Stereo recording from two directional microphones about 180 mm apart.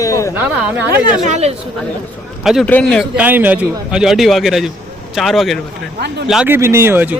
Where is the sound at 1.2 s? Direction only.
40° right (ahead or behind).